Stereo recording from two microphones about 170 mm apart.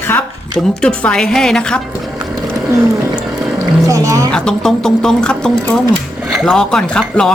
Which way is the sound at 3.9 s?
20° right (ahead or behind).